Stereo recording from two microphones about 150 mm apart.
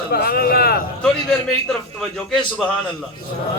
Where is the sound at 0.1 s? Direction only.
85° left.